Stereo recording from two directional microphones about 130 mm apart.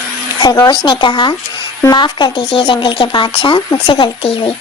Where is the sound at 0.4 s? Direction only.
25° left (ahead or behind).